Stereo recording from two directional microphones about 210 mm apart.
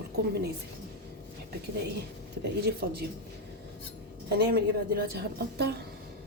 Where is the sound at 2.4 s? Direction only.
50° right (ahead or behind).